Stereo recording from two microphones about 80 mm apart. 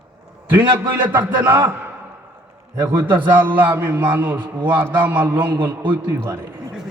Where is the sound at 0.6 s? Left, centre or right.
Right.